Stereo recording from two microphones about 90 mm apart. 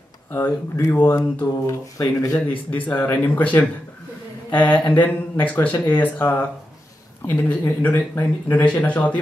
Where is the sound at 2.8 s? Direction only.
20° left (ahead or behind).